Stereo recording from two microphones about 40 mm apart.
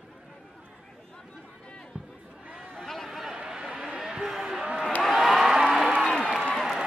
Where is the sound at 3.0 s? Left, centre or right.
Centre.